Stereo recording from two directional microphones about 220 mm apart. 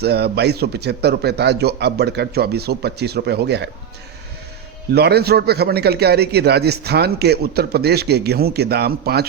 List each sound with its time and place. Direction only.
0.0 s a man's voice: 50° right (ahead or behind)
4.9 s a man's voice: 45° right (ahead or behind)